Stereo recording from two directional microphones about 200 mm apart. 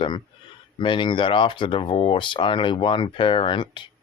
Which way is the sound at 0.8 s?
25° left (ahead or behind).